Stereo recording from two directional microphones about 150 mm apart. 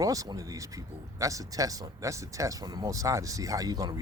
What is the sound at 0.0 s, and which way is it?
Speech, 25° right (ahead or behind).